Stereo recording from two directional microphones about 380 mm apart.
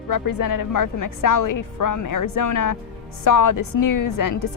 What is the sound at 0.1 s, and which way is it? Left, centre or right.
A woman's voice, left.